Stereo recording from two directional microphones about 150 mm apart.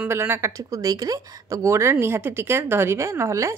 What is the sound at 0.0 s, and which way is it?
Speech, 15° right (ahead or behind).